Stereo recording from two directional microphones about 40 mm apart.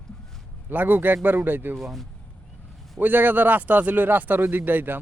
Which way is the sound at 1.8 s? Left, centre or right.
Centre.